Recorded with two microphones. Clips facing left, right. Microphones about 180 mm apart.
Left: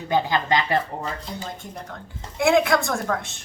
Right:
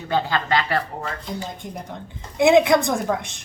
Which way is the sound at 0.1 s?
15° left (ahead or behind).